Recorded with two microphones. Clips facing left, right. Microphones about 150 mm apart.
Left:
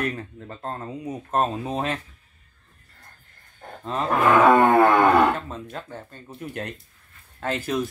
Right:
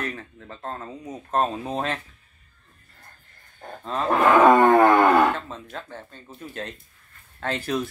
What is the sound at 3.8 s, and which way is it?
Speech, 5° left (ahead or behind).